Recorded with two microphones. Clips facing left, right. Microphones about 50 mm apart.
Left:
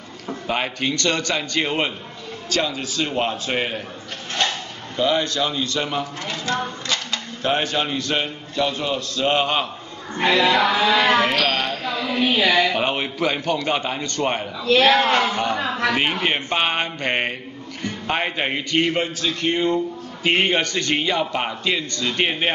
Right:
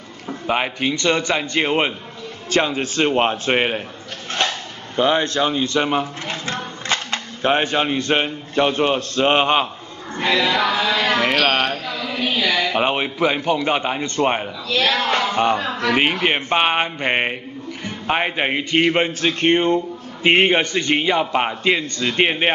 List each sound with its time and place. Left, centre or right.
0.3 s a man's voice: centre
2.5 s a man's voice: right
4.9 s speech: right
10.1 s music: centre
11.4 s a man's voice: right
12.2 s a woman's voice: centre
12.7 s a man's voice: centre
14.7 s speech: centre
15.0 s speech: centre
15.3 s a man's voice: right
20.2 s a man's voice: right